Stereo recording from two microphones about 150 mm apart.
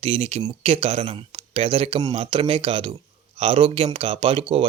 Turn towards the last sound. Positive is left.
turn(degrees=-40)  # may be behind; listen again after turning